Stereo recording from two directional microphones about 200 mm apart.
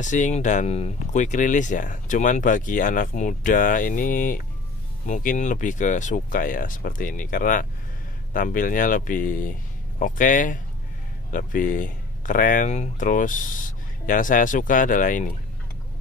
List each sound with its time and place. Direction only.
0.0 s speech: 40° left (ahead or behind)